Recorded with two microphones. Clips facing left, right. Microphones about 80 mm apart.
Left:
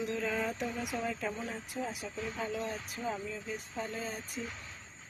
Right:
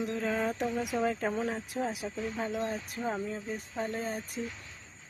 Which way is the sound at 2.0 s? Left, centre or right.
Right.